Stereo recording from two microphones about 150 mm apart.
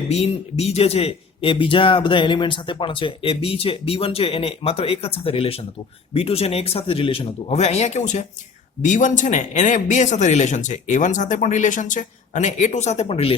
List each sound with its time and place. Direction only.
0.1 s a man's voice: 45° left (ahead or behind)